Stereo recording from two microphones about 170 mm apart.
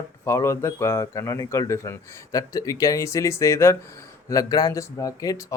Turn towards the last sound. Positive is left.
turn(degrees=20)  # may be behind; listen again after turning